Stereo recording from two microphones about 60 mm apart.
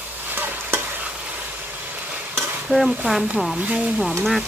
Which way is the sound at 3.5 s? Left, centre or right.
Right.